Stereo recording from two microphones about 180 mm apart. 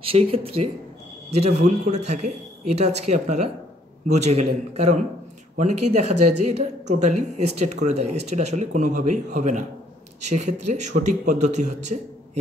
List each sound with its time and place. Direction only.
0.1 s speech: 30° right (ahead or behind)